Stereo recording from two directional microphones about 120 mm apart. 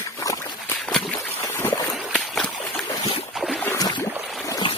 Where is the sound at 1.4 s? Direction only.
20° left (ahead or behind).